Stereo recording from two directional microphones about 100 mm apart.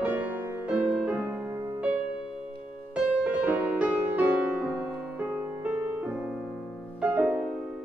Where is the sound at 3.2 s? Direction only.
15° right (ahead or behind).